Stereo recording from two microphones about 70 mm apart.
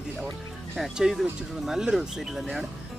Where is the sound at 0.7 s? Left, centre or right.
Centre.